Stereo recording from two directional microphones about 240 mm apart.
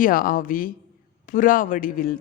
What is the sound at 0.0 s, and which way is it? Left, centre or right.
A man's voice, left.